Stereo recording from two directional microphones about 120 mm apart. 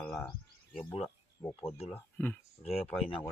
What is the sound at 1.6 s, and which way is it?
Speech, 55° left (ahead or behind).